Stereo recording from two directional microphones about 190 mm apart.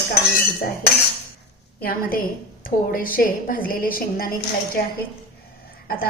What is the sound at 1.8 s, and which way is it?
A woman's voice, 50° left (ahead or behind).